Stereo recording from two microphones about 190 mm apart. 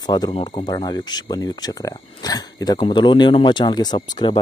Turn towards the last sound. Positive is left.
turn(degrees=20)  # may be behind; listen again after turning